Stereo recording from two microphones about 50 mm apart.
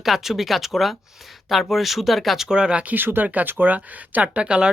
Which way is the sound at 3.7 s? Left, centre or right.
Right.